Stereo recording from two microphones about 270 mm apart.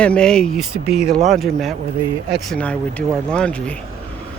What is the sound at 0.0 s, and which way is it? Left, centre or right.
Speech, centre.